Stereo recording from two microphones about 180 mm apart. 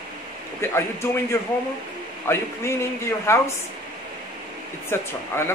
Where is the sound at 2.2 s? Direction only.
15° left (ahead or behind).